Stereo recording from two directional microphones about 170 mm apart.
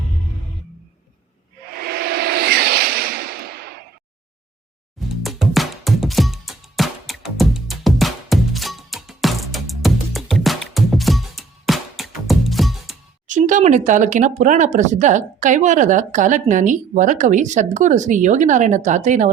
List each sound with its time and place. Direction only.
1.7 s a sound: 65° right (ahead or behind)
5.0 s music: centre (ahead or behind)
13.2 s speech: 50° right (ahead or behind)